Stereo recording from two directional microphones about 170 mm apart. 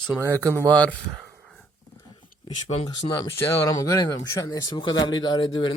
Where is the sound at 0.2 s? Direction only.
15° right (ahead or behind).